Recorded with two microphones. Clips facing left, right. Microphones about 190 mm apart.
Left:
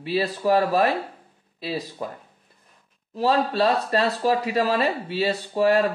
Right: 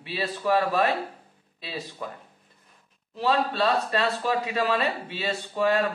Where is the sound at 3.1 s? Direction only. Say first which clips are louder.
Left 3 dB; 40° left (ahead or behind).